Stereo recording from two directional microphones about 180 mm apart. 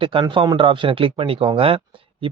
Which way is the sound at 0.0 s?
30° right (ahead or behind).